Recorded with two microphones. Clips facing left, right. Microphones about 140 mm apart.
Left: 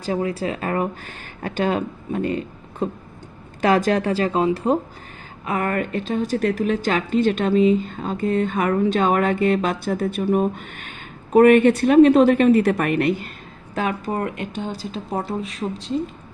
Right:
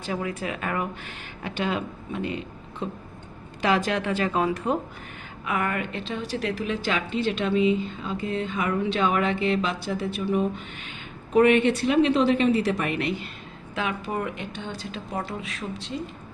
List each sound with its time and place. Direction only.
0.0 s a woman's voice: 35° left (ahead or behind)